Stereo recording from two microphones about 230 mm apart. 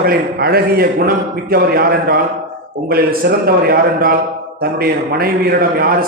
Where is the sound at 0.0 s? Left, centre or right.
Right.